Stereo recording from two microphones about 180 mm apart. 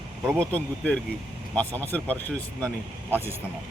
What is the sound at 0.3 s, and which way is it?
Speech, 5° left (ahead or behind).